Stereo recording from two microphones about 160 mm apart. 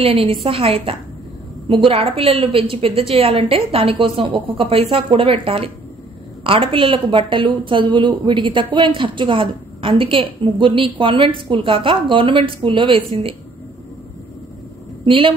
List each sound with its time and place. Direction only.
0.0 s a woman's voice: 35° right (ahead or behind)
15.0 s a woman's voice: 30° right (ahead or behind)